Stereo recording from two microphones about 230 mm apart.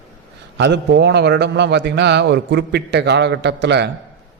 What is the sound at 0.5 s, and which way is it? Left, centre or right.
A man's voice, right.